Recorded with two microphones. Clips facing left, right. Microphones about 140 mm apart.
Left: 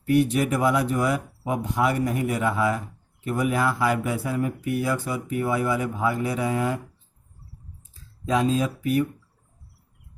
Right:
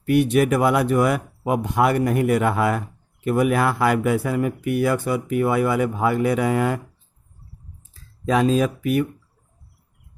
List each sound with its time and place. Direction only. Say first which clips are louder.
0.1 s speech: right 3 dB; 70° right (ahead or behind)
8.3 s speech: right 4 dB; 75° right (ahead or behind)